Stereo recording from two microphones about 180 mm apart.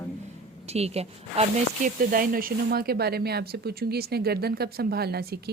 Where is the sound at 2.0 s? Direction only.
50° right (ahead or behind).